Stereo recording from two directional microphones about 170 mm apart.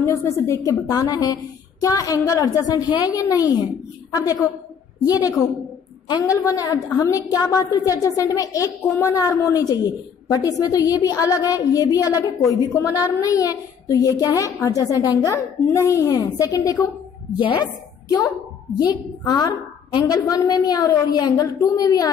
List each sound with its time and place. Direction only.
0.0 s a woman's voice: 15° left (ahead or behind)
5.0 s a woman's voice: 20° left (ahead or behind)